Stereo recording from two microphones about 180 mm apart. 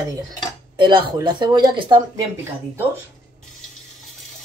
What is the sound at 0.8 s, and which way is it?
Speech, 25° right (ahead or behind).